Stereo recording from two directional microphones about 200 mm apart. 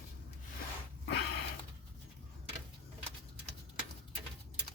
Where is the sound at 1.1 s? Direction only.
55° left (ahead or behind).